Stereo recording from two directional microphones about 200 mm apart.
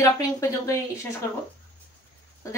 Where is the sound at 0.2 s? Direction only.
15° left (ahead or behind).